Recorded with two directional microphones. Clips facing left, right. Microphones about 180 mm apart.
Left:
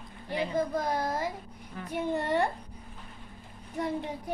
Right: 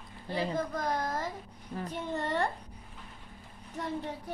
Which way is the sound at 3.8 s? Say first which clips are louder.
Left 4 dB; 15° left (ahead or behind).